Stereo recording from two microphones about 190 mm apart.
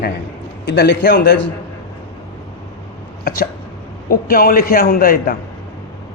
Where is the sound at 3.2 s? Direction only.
50° left (ahead or behind).